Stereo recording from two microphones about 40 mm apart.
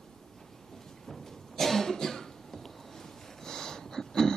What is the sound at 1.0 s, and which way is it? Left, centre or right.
Cough, centre.